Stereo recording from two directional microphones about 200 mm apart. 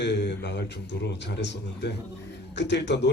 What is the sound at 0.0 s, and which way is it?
A man's voice, 60° left (ahead or behind).